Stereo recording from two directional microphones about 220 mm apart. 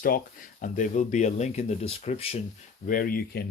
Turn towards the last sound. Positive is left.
turn(degrees=45)  # may be behind; listen again after turning